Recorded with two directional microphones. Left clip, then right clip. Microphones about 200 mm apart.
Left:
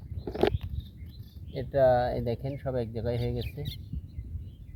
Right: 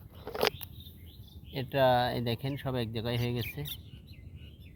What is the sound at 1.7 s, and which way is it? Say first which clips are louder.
Speech: left 3 dB; 5° right (ahead or behind).